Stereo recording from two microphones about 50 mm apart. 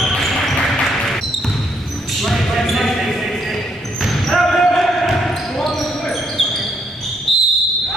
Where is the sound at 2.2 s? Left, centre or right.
Centre.